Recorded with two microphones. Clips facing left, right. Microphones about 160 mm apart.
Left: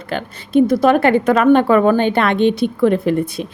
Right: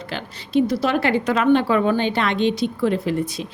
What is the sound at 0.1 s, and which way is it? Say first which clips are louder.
Speech: left 6 dB; 50° left (ahead or behind).